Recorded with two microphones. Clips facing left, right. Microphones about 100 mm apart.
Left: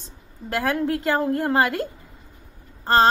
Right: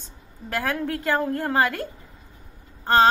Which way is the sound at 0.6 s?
15° left (ahead or behind).